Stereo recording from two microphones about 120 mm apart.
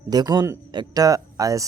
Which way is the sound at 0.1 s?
35° right (ahead or behind).